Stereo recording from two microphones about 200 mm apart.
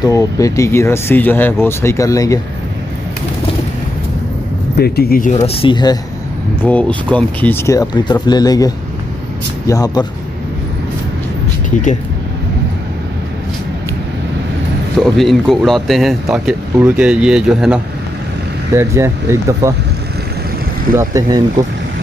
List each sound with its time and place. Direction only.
0.0 s speech: 15° left (ahead or behind)
4.7 s speech: 50° left (ahead or behind)
5.3 s speech: 30° left (ahead or behind)
6.6 s speech: 5° left (ahead or behind)
11.7 s speech: 40° left (ahead or behind)
15.0 s speech: centre (ahead or behind)
18.8 s speech: 15° right (ahead or behind)
20.9 s speech: 15° right (ahead or behind)